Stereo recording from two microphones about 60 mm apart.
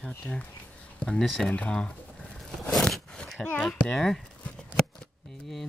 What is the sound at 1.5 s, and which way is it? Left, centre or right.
Speech, centre.